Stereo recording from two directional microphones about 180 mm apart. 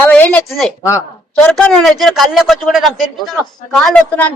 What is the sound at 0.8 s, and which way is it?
Speech, 15° left (ahead or behind).